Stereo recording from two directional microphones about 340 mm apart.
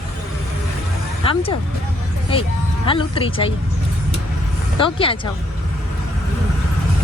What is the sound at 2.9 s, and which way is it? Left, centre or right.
Speech, centre.